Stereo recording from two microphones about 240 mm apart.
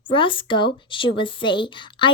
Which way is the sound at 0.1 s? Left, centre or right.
Left.